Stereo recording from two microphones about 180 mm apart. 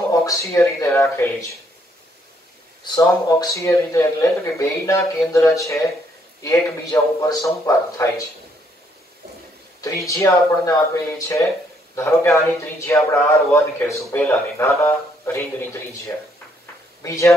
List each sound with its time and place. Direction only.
0.1 s a man's voice: 20° left (ahead or behind)
2.8 s a man's voice: 20° left (ahead or behind)
9.8 s a man's voice: 20° left (ahead or behind)
17.0 s a man's voice: 15° left (ahead or behind)